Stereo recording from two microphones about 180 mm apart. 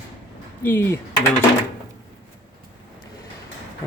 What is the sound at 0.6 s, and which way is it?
Speech, 10° left (ahead or behind).